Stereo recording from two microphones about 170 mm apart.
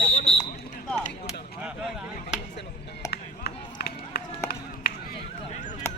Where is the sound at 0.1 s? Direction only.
35° left (ahead or behind).